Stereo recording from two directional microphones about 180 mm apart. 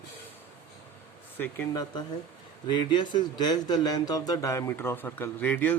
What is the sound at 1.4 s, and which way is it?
A man's voice, 10° left (ahead or behind).